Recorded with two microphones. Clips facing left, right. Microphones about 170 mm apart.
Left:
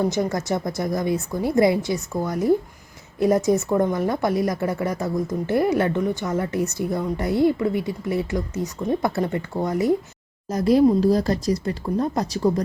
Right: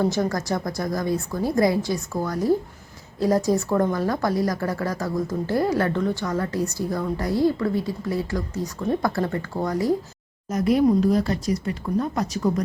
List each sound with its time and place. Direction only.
0.0 s a woman's voice: 20° left (ahead or behind)
10.5 s speech: 35° left (ahead or behind)